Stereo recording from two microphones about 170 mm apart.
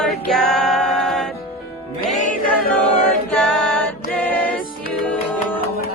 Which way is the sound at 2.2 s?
50° left (ahead or behind).